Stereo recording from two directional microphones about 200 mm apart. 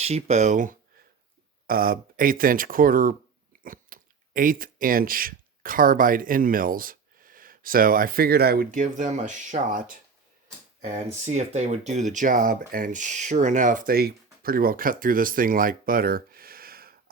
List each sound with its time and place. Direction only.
0.0 s speech: 30° right (ahead or behind); by 16.9 s 50° right (ahead or behind)